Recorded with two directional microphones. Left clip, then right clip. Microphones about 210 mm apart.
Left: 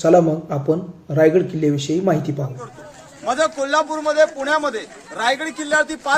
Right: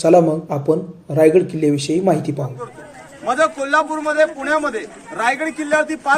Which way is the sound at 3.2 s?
Centre (ahead or behind).